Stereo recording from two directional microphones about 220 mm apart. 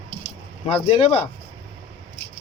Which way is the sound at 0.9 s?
25° left (ahead or behind).